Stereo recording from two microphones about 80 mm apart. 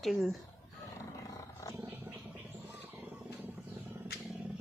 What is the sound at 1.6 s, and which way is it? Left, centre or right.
Roaring cats, left.